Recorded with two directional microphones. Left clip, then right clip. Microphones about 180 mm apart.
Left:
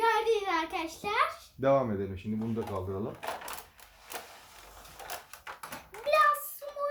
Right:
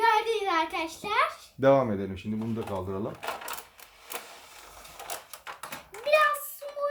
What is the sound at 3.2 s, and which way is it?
Cash register, 5° right (ahead or behind).